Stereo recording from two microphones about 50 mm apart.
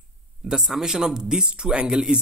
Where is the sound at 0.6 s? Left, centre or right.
Centre.